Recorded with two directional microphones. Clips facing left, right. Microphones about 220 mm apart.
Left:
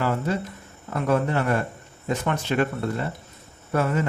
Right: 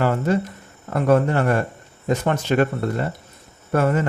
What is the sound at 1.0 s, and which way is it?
Speech, 50° right (ahead or behind).